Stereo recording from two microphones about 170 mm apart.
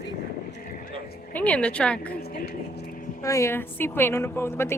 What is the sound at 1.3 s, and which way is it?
Speech, 10° left (ahead or behind).